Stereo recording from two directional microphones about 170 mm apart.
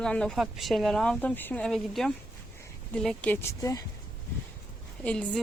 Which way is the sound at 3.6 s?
20° left (ahead or behind).